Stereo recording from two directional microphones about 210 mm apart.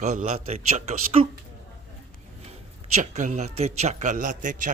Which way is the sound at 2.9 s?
35° right (ahead or behind).